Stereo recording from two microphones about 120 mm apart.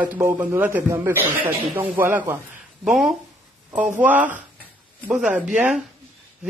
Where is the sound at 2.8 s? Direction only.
5° right (ahead or behind).